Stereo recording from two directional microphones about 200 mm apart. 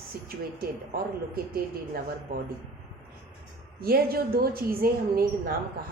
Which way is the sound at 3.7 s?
50° right (ahead or behind).